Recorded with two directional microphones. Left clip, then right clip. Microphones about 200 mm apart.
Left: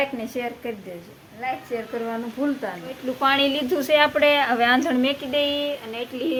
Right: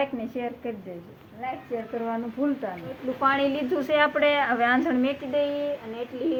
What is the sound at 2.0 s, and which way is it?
A woman's voice, 20° left (ahead or behind).